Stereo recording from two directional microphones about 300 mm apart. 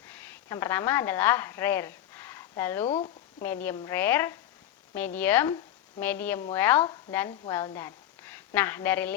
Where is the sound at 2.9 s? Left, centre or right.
Centre.